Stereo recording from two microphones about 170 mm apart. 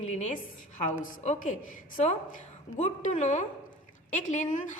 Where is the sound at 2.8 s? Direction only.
45° left (ahead or behind).